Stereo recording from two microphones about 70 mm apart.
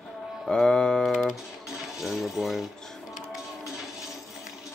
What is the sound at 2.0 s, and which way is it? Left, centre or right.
Speech, centre.